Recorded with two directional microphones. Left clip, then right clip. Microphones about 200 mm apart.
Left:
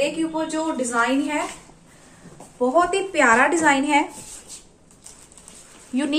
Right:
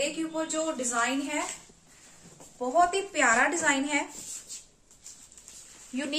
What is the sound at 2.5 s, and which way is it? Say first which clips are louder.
A woman's voice: left 6 dB; 25° left (ahead or behind).